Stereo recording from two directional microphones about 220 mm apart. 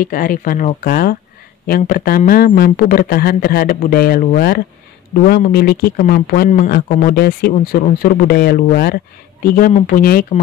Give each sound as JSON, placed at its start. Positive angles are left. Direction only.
{"t": 0.0, "sound": "speech", "side_deg": 40}